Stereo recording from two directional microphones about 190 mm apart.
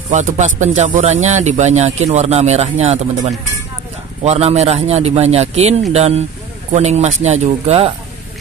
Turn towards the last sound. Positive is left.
turn(degrees=-30)  # may be behind; listen again after turning